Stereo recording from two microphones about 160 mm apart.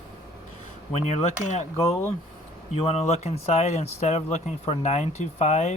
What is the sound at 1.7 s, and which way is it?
Speech, 15° left (ahead or behind).